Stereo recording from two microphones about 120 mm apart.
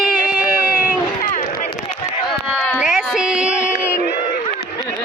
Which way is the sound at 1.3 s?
75° left (ahead or behind).